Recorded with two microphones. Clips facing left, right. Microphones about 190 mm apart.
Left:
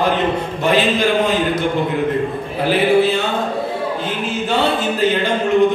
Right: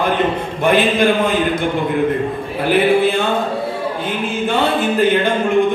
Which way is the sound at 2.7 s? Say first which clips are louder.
Right 1 dB; 55° right (ahead or behind).